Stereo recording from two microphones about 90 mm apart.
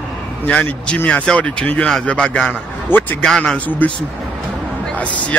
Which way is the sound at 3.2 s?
10° left (ahead or behind).